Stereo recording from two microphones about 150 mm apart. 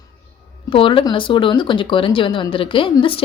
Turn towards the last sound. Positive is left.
turn(degrees=35)  # may be behind; listen again after turning